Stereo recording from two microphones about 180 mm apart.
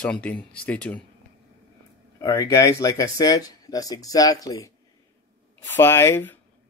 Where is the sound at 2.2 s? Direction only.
20° left (ahead or behind).